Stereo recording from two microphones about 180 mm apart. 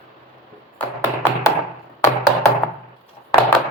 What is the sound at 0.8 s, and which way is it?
Tap, 10° left (ahead or behind).